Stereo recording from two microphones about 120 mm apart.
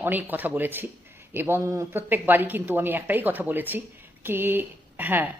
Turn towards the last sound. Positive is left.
turn(degrees=-15)  # may be behind; listen again after turning